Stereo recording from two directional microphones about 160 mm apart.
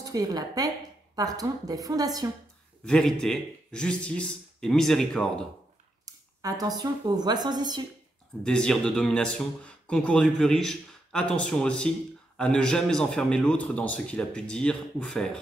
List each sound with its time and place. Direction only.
0.1 s a woman's voice: 25° right (ahead or behind)
2.8 s speech: 5° left (ahead or behind)
6.0 s speech: 25° right (ahead or behind)
8.5 s speech: 5° left (ahead or behind)